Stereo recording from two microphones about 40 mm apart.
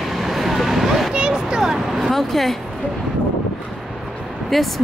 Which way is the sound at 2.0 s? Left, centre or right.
Centre.